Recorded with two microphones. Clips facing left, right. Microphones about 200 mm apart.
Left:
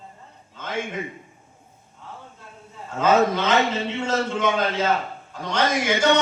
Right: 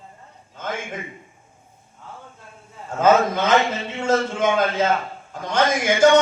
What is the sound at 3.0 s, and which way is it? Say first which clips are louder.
A man's voice: right 2 dB; 50° right (ahead or behind).